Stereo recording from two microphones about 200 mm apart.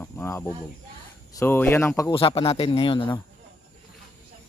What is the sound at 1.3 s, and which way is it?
Speech, 10° left (ahead or behind).